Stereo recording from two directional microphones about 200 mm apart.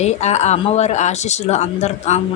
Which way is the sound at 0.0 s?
35° left (ahead or behind).